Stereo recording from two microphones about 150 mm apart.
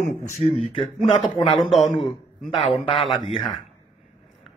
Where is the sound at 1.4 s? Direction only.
Centre (ahead or behind).